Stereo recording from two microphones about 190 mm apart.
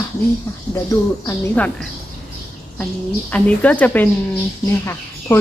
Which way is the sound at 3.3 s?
5° left (ahead or behind).